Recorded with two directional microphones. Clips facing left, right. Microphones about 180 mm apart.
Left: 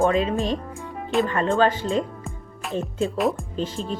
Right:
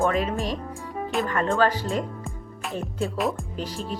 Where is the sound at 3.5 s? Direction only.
25° left (ahead or behind).